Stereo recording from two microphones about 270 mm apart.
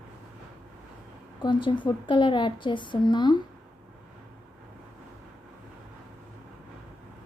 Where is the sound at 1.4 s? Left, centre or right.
Centre.